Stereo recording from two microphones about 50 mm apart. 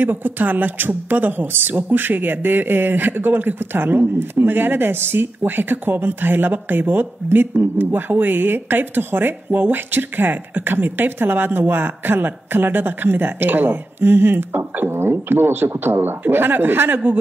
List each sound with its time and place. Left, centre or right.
0.0 s speech: right
15.7 s speech: right
16.0 s speech: right